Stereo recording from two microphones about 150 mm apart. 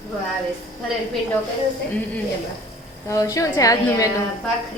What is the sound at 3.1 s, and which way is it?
A woman's voice, 20° left (ahead or behind).